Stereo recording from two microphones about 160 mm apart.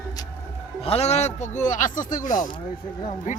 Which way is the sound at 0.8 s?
40° left (ahead or behind).